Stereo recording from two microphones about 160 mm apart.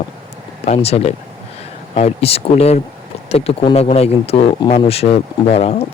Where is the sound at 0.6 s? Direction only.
40° left (ahead or behind).